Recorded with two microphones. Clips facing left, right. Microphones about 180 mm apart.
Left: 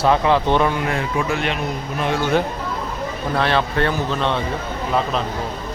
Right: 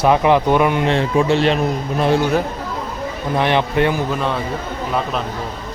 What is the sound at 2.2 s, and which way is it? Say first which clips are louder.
Speech: right 1 dB; 10° right (ahead or behind).